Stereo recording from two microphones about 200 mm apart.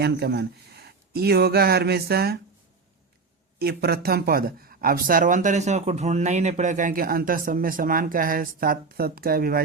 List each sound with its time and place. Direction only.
0.0 s speech: 55° right (ahead or behind)
3.6 s speech: 50° right (ahead or behind)